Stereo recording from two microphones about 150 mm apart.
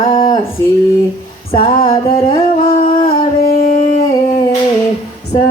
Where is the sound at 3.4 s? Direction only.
70° left (ahead or behind).